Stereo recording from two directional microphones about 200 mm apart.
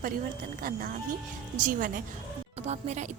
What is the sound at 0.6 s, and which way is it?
A woman's voice, 45° right (ahead or behind).